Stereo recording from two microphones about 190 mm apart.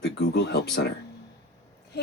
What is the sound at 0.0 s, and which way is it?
Speech, 60° left (ahead or behind).